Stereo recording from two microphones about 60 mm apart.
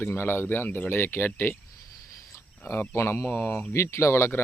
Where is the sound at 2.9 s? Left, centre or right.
Left.